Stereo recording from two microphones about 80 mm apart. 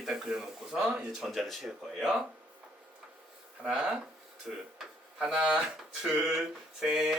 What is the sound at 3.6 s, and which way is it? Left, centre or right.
Speech, centre.